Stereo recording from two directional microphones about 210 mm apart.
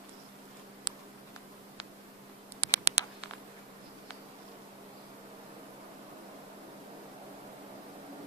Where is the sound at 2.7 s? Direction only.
15° left (ahead or behind).